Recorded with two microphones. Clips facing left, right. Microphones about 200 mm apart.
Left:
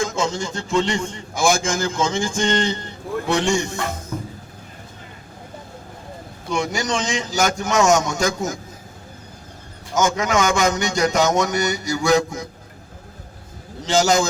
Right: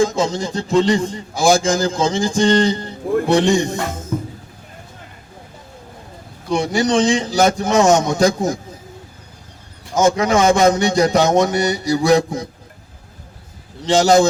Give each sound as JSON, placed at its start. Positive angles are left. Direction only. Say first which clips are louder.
{"t": 0.0, "sound": "a man's voice", "louder": "right 5 dB", "side_deg": -35}
{"t": 6.5, "sound": "a man's voice", "louder": "right 6 dB", "side_deg": -35}
{"t": 9.9, "sound": "a man's voice", "louder": "right 5 dB", "side_deg": -35}
{"t": 13.8, "sound": "a man's voice", "louder": "right 5 dB", "side_deg": -35}